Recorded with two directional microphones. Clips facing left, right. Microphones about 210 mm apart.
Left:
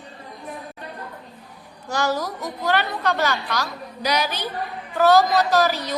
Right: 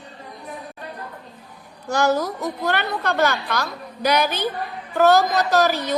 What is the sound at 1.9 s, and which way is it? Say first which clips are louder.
A woman's voice: right 4 dB; 50° right (ahead or behind).